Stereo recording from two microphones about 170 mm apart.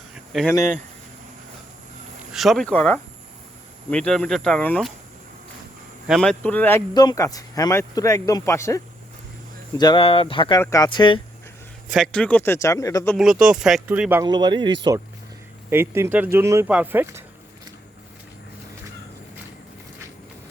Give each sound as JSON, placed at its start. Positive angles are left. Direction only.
{"t": 0.3, "sound": "speech", "side_deg": 0}
{"t": 2.3, "sound": "speech", "side_deg": 0}
{"t": 6.1, "sound": "speech", "side_deg": 5}
{"t": 6.9, "sound": "speech", "side_deg": 25}
{"t": 10.6, "sound": "speech", "side_deg": 20}
{"t": 10.8, "sound": "speech", "side_deg": 30}
{"t": 11.9, "sound": "speech", "side_deg": 0}
{"t": 13.1, "sound": "speech", "side_deg": 0}
{"t": 14.3, "sound": "speech", "side_deg": -25}
{"t": 15.7, "sound": "speech", "side_deg": -15}